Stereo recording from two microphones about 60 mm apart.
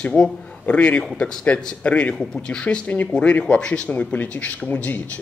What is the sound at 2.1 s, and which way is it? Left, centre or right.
A man's voice, centre.